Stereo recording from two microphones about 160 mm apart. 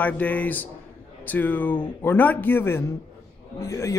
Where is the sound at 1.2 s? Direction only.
10° left (ahead or behind).